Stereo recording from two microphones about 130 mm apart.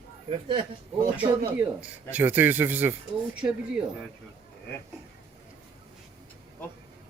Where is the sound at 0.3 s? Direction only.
40° right (ahead or behind).